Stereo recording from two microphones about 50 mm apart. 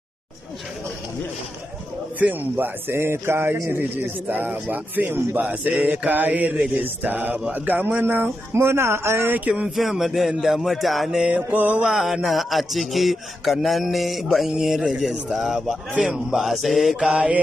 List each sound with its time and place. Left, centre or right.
2.1 s mantra: right
2.9 s a man's voice: right
4.3 s mantra: right
7.5 s speech: right
9.3 s mantra: right
9.8 s speech: centre
11.2 s music: right
11.8 s speech: centre
16.9 s mantra: centre